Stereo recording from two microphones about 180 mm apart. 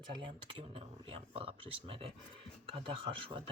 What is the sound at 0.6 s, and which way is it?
Speech, 30° right (ahead or behind).